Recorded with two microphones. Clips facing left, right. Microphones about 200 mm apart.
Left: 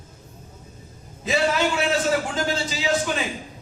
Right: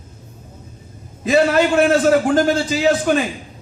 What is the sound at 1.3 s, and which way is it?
A man's voice, 55° right (ahead or behind).